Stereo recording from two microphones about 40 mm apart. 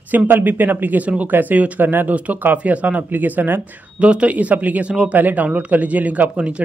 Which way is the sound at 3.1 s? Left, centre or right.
Right.